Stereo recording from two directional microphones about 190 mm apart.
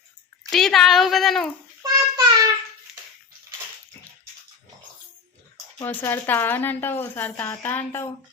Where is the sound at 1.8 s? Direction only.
20° right (ahead or behind).